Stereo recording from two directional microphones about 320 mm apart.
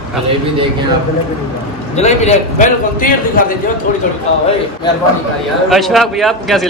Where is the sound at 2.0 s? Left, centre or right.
Left.